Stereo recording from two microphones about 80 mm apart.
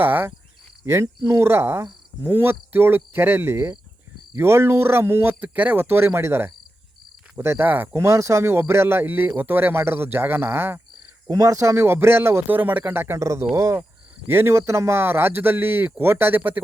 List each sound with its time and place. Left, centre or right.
0.0 s speech: right
7.9 s speech: right
11.3 s speech: right